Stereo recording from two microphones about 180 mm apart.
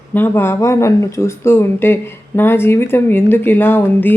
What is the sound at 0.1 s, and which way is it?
Speech, 10° left (ahead or behind).